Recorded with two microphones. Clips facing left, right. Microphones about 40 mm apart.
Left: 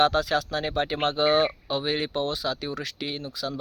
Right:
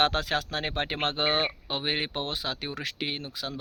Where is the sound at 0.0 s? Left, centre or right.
Right.